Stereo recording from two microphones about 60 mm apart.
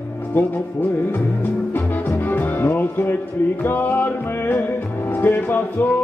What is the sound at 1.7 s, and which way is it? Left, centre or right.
Music, left.